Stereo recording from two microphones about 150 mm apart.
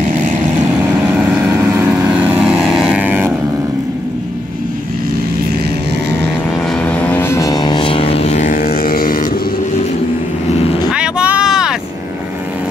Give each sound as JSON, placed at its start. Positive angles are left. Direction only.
{"t": 0.7, "sound": "vehicle", "side_deg": -10}
{"t": 6.8, "sound": "vehicle", "side_deg": 10}
{"t": 10.9, "sound": "vehicle", "side_deg": -5}